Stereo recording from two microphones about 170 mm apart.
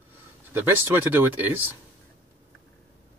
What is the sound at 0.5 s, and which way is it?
Speech, 15° right (ahead or behind).